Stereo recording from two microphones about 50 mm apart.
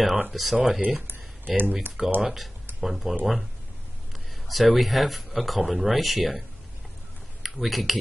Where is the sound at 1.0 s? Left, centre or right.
Right.